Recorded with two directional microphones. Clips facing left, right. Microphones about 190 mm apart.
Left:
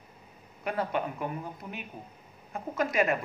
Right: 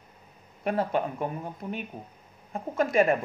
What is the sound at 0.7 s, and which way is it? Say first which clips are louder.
A woman's voice: right 3 dB; 30° right (ahead or behind).